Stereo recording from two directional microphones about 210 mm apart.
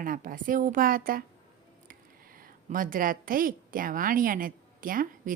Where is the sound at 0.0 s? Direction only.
40° right (ahead or behind).